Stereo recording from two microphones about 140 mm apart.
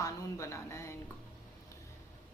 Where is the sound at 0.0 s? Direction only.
20° left (ahead or behind).